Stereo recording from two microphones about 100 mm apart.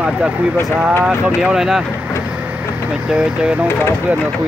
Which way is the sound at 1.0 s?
10° right (ahead or behind).